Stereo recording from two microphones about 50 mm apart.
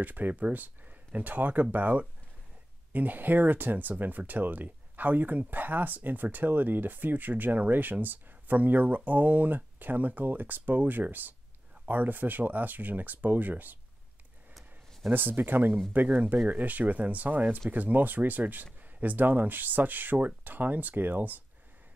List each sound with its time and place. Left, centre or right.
0.0 s speech: right
15.1 s speech: right